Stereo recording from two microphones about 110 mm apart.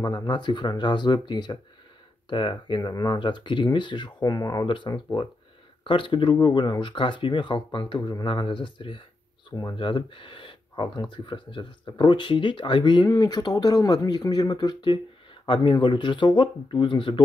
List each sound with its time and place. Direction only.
0.0 s speech: 40° left (ahead or behind)
4.6 s speech: 50° left (ahead or behind)
9.5 s speech: 30° left (ahead or behind)
9.8 s speech: 50° left (ahead or behind)